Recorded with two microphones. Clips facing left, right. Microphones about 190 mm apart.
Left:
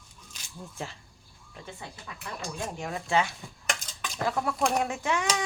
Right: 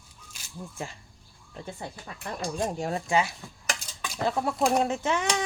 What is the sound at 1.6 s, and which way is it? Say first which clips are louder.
Speech: right 4 dB; 45° right (ahead or behind).